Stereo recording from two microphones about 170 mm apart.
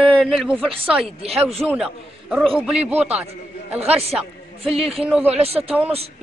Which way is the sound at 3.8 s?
35° right (ahead or behind).